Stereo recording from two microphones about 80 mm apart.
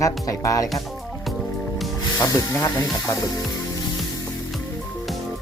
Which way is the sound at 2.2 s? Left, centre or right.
Left.